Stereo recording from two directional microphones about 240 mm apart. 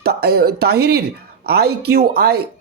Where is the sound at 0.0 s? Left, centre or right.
Right.